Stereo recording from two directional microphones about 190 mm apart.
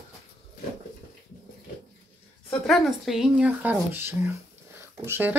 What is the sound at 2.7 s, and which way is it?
Speech, centre (ahead or behind).